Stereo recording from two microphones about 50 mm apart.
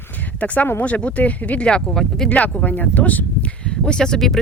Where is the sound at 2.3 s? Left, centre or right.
Left.